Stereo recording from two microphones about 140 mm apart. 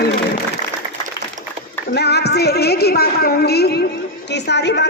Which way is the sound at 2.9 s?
90° left.